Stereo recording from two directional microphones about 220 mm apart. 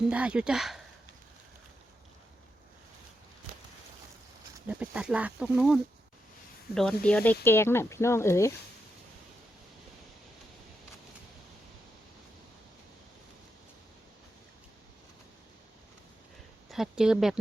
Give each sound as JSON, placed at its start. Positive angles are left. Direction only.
{"t": 0.1, "sound": "speech", "side_deg": -5}
{"t": 4.6, "sound": "speech", "side_deg": -5}
{"t": 16.6, "sound": "speech", "side_deg": 0}